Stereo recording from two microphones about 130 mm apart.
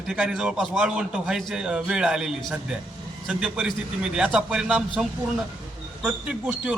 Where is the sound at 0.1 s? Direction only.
5° right (ahead or behind).